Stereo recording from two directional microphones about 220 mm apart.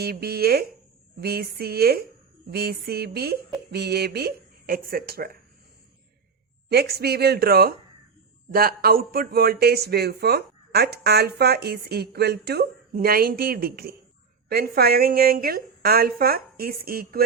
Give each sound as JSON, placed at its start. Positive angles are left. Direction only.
{"t": 0.0, "sound": "speech", "side_deg": -45}
{"t": 6.7, "sound": "speech", "side_deg": -45}